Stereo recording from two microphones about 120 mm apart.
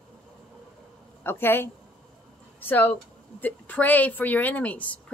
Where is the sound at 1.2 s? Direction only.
20° left (ahead or behind).